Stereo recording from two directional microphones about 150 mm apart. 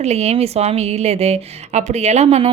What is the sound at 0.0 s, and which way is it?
A woman's voice, 45° right (ahead or behind).